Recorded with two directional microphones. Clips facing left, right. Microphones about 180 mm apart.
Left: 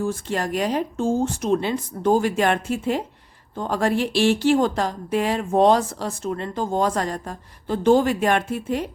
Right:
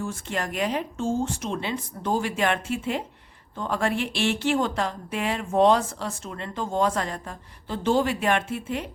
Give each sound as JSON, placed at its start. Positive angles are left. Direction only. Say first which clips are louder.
{"t": 0.0, "sound": "speech", "louder": "left 5 dB", "side_deg": 35}